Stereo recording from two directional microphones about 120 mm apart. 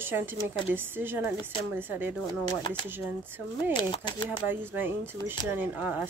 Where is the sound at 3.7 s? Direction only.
40° left (ahead or behind).